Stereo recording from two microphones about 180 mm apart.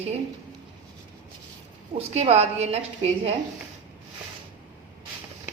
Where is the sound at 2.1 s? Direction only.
35° right (ahead or behind).